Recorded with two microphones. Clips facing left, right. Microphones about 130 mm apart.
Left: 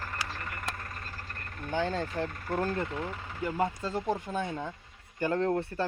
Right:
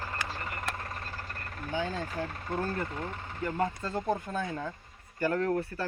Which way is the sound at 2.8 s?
15° left (ahead or behind).